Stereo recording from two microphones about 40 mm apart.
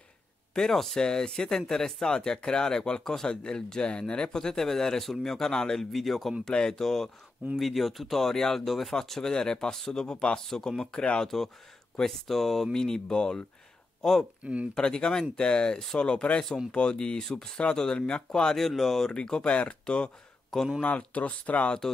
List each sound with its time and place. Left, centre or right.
0.6 s speech: centre
6.4 s speech: centre
9.8 s speech: centre
10.0 s speech: left
10.4 s speech: centre
14.4 s speech: right
14.8 s speech: left
18.7 s speech: centre
19.1 s speech: left
20.8 s speech: left